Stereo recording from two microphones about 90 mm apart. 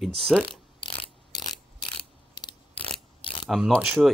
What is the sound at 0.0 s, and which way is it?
Speech, centre (ahead or behind).